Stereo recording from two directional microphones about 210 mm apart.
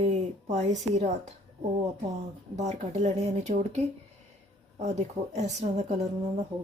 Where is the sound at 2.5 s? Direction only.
35° right (ahead or behind).